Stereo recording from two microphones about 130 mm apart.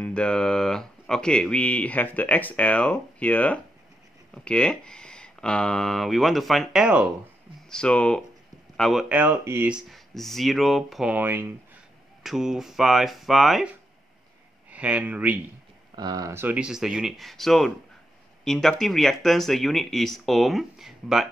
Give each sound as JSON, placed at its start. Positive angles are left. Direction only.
{"t": 0.0, "sound": "speech", "side_deg": 10}
{"t": 7.7, "sound": "speech", "side_deg": 10}
{"t": 9.1, "sound": "speech", "side_deg": -10}
{"t": 9.7, "sound": "speech", "side_deg": 0}
{"t": 11.1, "sound": "speech", "side_deg": -15}
{"t": 12.2, "sound": "speech", "side_deg": -5}
{"t": 14.7, "sound": "speech", "side_deg": -10}
{"t": 16.0, "sound": "speech", "side_deg": -30}
{"t": 16.4, "sound": "speech", "side_deg": -5}